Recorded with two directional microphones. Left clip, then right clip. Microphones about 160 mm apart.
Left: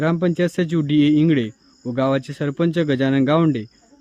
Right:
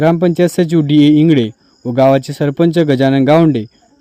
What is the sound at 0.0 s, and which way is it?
Speech, 30° right (ahead or behind).